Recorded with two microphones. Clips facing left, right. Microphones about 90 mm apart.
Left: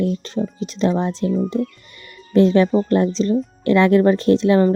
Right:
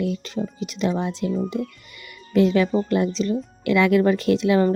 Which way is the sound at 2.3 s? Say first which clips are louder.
Left 4 dB; 30° left (ahead or behind).